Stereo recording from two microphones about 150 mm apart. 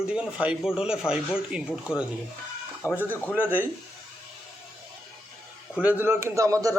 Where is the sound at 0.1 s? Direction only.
5° right (ahead or behind).